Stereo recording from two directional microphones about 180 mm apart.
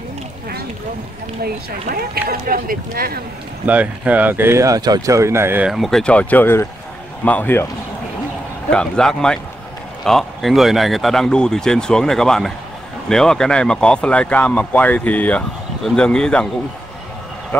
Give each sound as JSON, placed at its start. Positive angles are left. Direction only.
{"t": 1.4, "sound": "speech", "side_deg": -55}
{"t": 3.6, "sound": "speech", "side_deg": -10}
{"t": 5.7, "sound": "speech", "side_deg": 0}
{"t": 8.6, "sound": "speech", "side_deg": 5}